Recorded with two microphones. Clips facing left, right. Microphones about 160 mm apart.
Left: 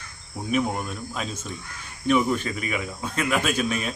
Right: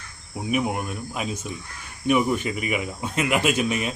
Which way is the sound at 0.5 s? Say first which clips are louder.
Even; 10° right (ahead or behind).